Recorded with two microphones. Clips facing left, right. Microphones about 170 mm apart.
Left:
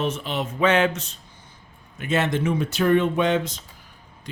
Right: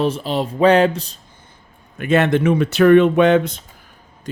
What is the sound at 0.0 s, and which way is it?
Speech, 35° right (ahead or behind).